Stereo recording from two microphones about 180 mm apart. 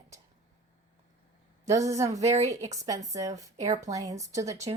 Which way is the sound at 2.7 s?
20° right (ahead or behind).